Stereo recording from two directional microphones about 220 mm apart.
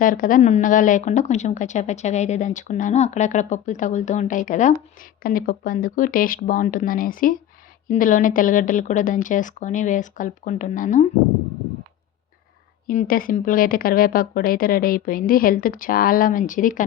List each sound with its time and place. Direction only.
0.0 s a woman's voice: 40° left (ahead or behind)
12.9 s a woman's voice: 40° left (ahead or behind)